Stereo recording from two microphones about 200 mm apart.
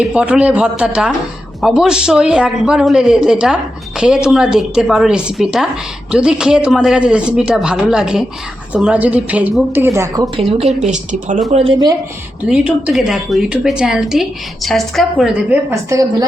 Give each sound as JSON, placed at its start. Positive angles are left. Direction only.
{"t": 0.0, "sound": "a man's voice", "side_deg": -5}
{"t": 10.3, "sound": "a woman's voice", "side_deg": -30}
{"t": 11.5, "sound": "speech", "side_deg": -25}
{"t": 12.5, "sound": "a man's voice", "side_deg": -5}